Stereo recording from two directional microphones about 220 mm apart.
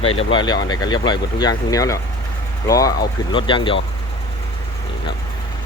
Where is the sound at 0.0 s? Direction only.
25° left (ahead or behind).